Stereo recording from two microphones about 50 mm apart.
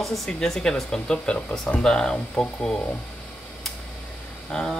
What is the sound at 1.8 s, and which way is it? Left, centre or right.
Speech, centre.